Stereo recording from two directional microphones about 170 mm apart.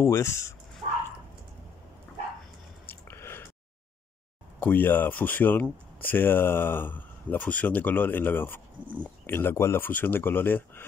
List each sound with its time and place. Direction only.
0.0 s speech: 15° left (ahead or behind)
3.1 s a sound: 15° left (ahead or behind)
4.6 s speech: 10° left (ahead or behind)